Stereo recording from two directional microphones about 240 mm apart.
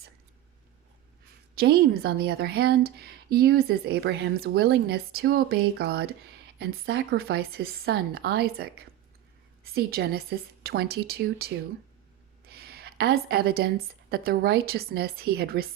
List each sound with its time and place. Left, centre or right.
1.5 s a woman's voice: right